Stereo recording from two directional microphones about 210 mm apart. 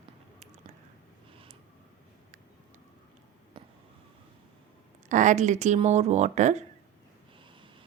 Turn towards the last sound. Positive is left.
turn(degrees=-35)  # may be behind; listen again after turning